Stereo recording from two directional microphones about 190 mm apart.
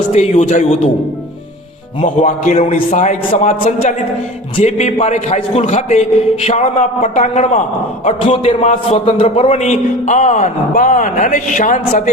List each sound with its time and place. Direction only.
0.1 s a man's voice: 35° left (ahead or behind)
2.0 s a man's voice: 40° left (ahead or behind)